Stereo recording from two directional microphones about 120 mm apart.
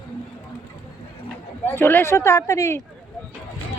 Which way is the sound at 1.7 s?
15° left (ahead or behind).